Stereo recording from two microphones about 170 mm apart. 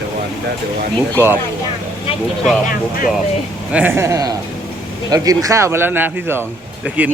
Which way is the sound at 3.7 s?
15° right (ahead or behind).